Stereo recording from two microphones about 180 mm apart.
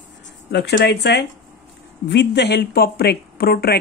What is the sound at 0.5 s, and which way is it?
Speech, 65° left (ahead or behind).